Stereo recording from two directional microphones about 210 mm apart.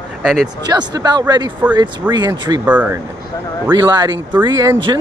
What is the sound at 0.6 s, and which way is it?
Speech, 20° right (ahead or behind).